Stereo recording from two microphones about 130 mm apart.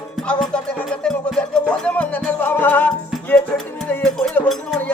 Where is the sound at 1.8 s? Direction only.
10° left (ahead or behind).